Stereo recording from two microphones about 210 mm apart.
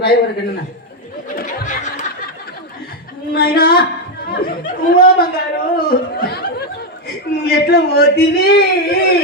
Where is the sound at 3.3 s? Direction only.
45° left (ahead or behind).